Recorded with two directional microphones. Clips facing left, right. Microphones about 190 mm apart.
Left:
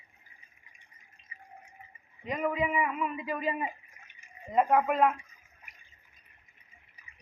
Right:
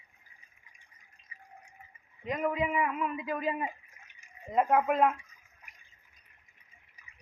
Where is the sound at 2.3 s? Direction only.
5° left (ahead or behind).